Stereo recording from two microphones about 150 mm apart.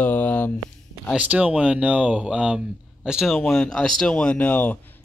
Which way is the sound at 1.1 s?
10° right (ahead or behind).